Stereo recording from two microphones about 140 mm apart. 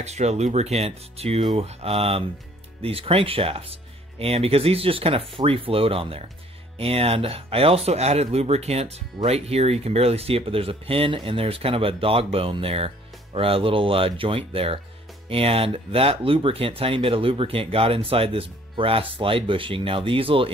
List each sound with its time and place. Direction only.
0.0 s speech: 50° right (ahead or behind)